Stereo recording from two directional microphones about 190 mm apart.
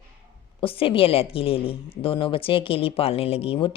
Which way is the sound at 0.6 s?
30° left (ahead or behind).